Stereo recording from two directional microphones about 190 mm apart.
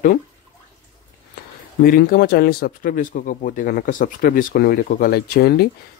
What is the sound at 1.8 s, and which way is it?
Speech, 50° left (ahead or behind).